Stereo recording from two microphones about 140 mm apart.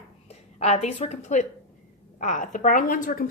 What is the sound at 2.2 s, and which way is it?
A woman's voice, 70° left (ahead or behind).